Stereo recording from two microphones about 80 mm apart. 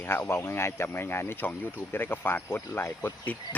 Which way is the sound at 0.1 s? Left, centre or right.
Left.